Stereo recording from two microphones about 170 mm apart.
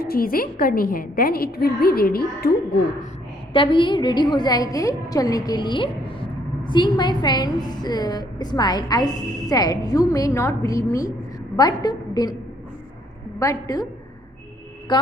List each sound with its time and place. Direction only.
0.0 s a woman's voice: 60° left (ahead or behind)
3.5 s a woman's voice: 30° left (ahead or behind)
13.4 s a woman's voice: 20° left (ahead or behind)
14.9 s a woman's voice: 25° left (ahead or behind)